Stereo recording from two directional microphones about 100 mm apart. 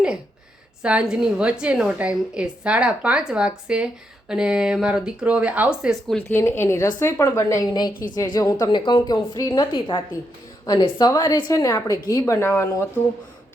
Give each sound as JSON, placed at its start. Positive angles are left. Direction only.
{"t": 0.8, "sound": "a woman's voice", "side_deg": -10}
{"t": 6.1, "sound": "a woman's voice", "side_deg": 20}
{"t": 7.7, "sound": "a woman's voice", "side_deg": 45}
{"t": 8.7, "sound": "a woman's voice", "side_deg": 50}
{"t": 9.7, "sound": "a woman's voice", "side_deg": 60}
{"t": 10.9, "sound": "a woman's voice", "side_deg": 45}